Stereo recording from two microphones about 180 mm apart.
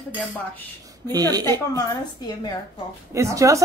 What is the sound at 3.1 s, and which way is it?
Speech, 15° right (ahead or behind).